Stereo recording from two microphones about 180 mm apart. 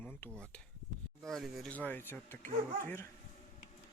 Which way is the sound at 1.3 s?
Centre (ahead or behind).